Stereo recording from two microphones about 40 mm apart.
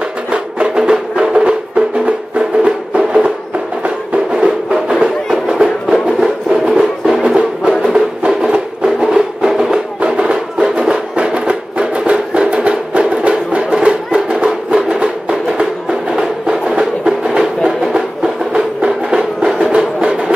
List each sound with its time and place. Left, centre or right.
0.3 s music: right
7.8 s music: right